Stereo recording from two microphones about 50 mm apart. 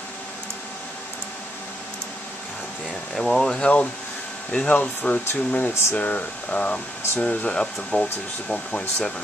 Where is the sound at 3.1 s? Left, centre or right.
Centre.